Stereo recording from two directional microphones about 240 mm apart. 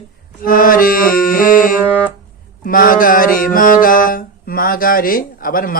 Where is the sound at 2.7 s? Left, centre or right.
Left.